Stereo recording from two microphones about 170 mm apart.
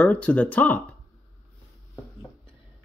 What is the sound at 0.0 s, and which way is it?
Speech, 10° left (ahead or behind).